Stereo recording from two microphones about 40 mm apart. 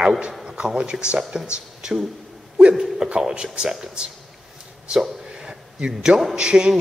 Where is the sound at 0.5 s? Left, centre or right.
Right.